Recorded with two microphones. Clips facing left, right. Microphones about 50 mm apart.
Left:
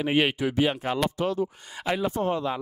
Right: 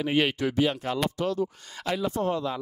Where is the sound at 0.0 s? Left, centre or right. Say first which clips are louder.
Left 1 dB; left.